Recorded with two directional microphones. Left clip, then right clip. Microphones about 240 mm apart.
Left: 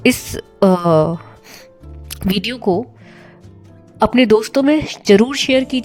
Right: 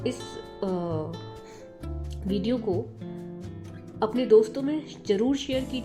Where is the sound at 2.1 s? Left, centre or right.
Left.